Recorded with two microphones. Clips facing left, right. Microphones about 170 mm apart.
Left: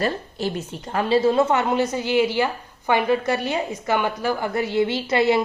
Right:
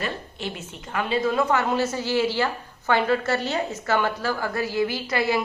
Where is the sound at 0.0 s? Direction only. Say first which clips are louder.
Left 6 dB; 40° left (ahead or behind).